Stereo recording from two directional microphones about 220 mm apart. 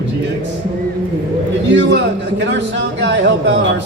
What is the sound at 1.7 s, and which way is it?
Speech, 55° right (ahead or behind).